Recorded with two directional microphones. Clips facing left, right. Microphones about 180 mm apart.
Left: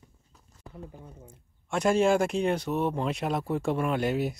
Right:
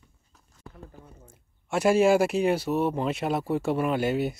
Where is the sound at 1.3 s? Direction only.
5° right (ahead or behind).